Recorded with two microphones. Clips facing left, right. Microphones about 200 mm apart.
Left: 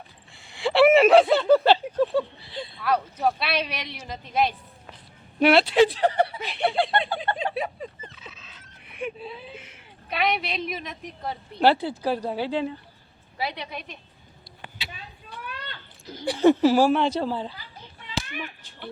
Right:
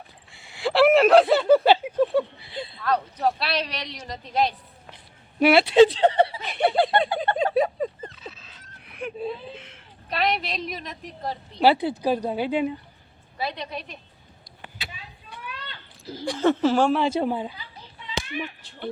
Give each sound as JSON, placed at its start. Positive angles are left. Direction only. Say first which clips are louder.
{"t": 0.3, "sound": "speech", "louder": "left 1 dB", "side_deg": -5}
{"t": 2.8, "sound": "speech", "louder": "even", "side_deg": 5}
{"t": 5.7, "sound": "speech", "louder": "right 4 dB", "side_deg": -25}
{"t": 6.5, "sound": "a sound", "louder": "right 3 dB", "side_deg": -45}
{"t": 8.3, "sound": "a sound", "louder": "right 2 dB", "side_deg": 0}
{"t": 9.6, "sound": "a woman's voice", "louder": "right 1 dB", "side_deg": 5}
{"t": 11.8, "sound": "speech", "louder": "right 3 dB", "side_deg": -15}
{"t": 13.4, "sound": "speech", "louder": "right 1 dB", "side_deg": 10}
{"t": 16.2, "sound": "speech", "louder": "left 3 dB", "side_deg": 10}
{"t": 17.0, "sound": "speech", "louder": "right 1 dB", "side_deg": -5}